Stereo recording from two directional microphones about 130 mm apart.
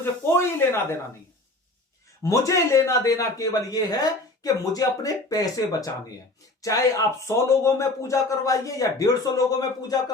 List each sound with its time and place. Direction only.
0.0 s speech: 20° left (ahead or behind)
2.2 s speech: 25° left (ahead or behind)